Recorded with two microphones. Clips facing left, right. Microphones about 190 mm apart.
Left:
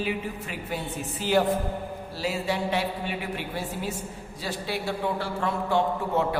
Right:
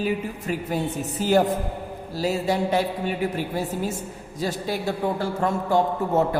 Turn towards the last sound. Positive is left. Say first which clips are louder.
# right 4 dB
turn(degrees=-40)  # may be behind; listen again after turning